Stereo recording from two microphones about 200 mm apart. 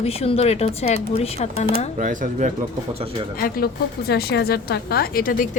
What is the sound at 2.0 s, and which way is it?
Speech, 40° right (ahead or behind).